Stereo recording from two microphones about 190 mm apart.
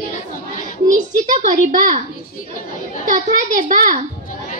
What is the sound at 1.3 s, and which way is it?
Speech, 40° right (ahead or behind).